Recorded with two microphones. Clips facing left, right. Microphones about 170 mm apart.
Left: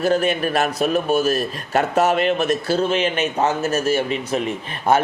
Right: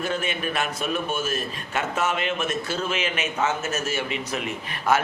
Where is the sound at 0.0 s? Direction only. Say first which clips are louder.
Left 9 dB; 40° left (ahead or behind).